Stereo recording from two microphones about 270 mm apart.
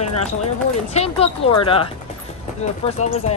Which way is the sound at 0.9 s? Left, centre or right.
Left.